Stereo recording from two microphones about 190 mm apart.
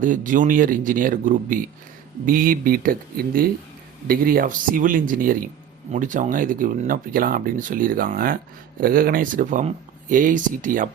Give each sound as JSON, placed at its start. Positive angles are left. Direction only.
{"t": 0.0, "sound": "speech", "side_deg": -45}